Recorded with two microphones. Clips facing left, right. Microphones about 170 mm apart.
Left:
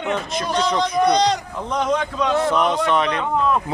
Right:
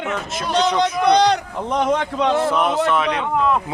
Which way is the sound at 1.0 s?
60° right (ahead or behind).